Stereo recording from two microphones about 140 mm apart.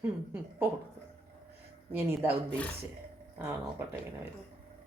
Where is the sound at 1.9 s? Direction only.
15° right (ahead or behind).